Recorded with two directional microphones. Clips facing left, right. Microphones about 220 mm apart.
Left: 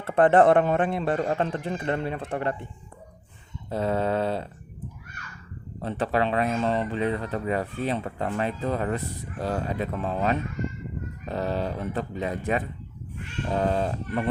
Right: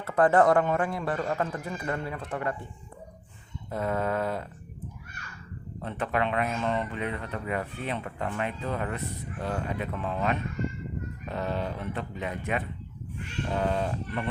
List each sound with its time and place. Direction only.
0.0 s speech: 25° left (ahead or behind)
3.7 s speech: 30° left (ahead or behind)
5.8 s speech: 30° left (ahead or behind)